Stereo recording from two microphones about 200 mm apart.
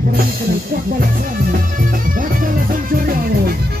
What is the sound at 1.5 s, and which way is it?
Music, 45° right (ahead or behind).